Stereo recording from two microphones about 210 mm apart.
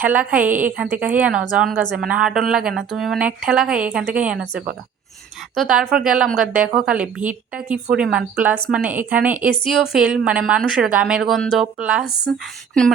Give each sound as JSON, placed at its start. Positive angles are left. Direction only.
{"t": 0.0, "sound": "a woman's voice", "side_deg": -10}
{"t": 5.5, "sound": "a woman's voice", "side_deg": 0}